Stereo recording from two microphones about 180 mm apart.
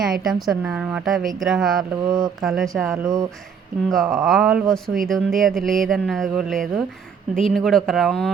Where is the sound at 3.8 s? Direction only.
Centre (ahead or behind).